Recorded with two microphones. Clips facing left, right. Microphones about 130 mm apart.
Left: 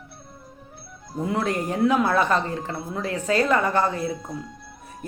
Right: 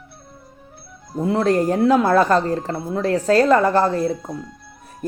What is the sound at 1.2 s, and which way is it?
Speech, 30° right (ahead or behind).